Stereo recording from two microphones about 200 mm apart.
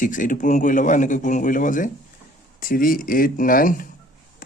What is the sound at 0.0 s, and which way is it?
Speech, 40° left (ahead or behind).